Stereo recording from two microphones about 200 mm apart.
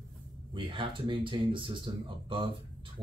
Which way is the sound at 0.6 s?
25° right (ahead or behind).